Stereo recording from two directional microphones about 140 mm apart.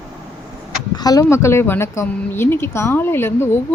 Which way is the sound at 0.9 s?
25° left (ahead or behind).